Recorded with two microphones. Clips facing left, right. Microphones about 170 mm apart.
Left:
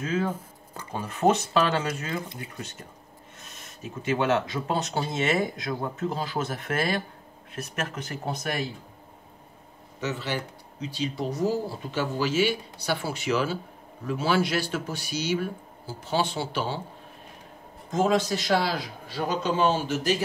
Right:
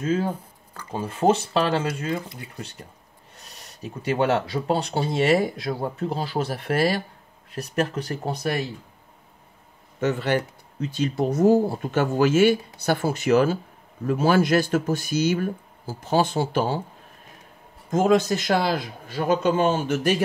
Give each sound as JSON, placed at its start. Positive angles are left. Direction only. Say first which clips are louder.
{"t": 0.9, "sound": "speech", "louder": "right 2 dB", "side_deg": -30}
{"t": 3.3, "sound": "speech", "louder": "right 2 dB", "side_deg": -35}
{"t": 9.9, "sound": "speech", "louder": "right 8 dB", "side_deg": -55}
{"t": 17.8, "sound": "speech", "louder": "right 4 dB", "side_deg": -45}